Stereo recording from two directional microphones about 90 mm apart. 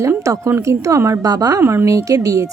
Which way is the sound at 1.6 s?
30° right (ahead or behind).